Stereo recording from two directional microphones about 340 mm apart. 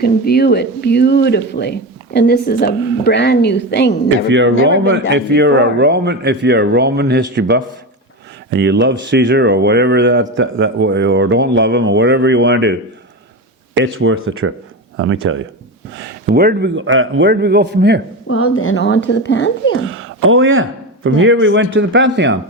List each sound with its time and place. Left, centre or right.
0.0 s speech: left
4.3 s a man's voice: right
13.7 s a man's voice: right
18.3 s a woman's voice: left
19.8 s speech: right